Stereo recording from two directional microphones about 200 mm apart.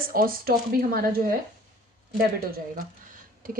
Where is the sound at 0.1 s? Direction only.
45° right (ahead or behind).